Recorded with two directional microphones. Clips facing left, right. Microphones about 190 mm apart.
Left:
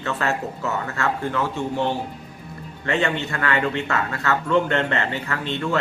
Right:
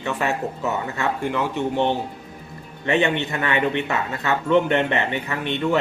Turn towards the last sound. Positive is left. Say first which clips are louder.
# right 2 dB
turn(degrees=-20)  # may be behind; listen again after turning